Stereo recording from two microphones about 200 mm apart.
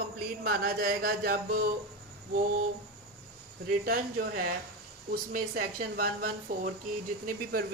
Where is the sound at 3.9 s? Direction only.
45° right (ahead or behind).